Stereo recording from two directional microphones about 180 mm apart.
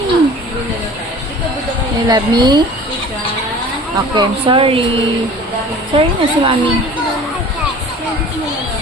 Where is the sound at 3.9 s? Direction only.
25° right (ahead or behind).